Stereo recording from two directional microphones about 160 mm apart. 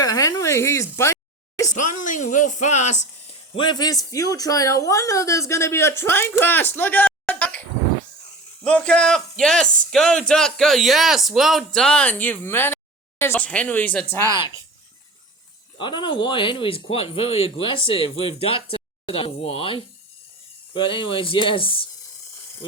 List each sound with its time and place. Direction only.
0.0 s a sound: 20° left (ahead or behind)
2.0 s speech: 50° left (ahead or behind)
3.5 s speech: 30° left (ahead or behind); by 7.6 s 10° left (ahead or behind)
8.6 s a man's voice: 5° left (ahead or behind)
15.8 s speech: 30° left (ahead or behind)